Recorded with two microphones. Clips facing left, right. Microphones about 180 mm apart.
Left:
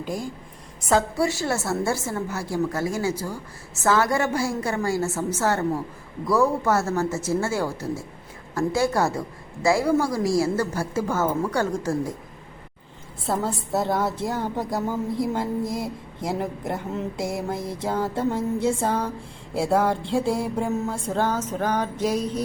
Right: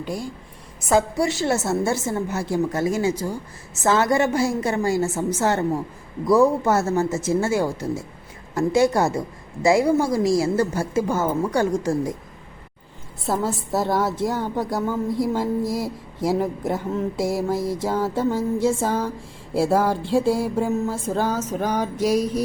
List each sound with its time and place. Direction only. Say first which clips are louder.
0.0 s a woman's voice: right 1 dB; centre (ahead or behind)
1.3 s a woman's voice: right 4 dB; 20° right (ahead or behind)
13.2 s a woman's voice: right 2 dB; centre (ahead or behind)